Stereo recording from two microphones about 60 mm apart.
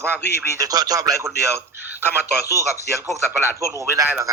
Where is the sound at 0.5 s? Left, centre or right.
Right.